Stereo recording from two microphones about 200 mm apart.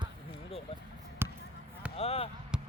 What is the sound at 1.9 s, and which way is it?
Speech, 30° left (ahead or behind).